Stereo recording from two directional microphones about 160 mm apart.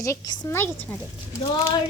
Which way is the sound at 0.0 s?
20° left (ahead or behind).